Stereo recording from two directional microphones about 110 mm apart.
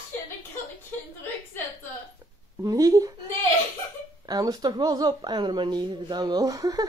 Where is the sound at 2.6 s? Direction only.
35° right (ahead or behind).